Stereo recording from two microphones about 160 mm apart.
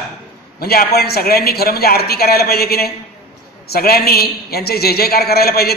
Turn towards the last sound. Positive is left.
turn(degrees=75)  # may be behind; listen again after turning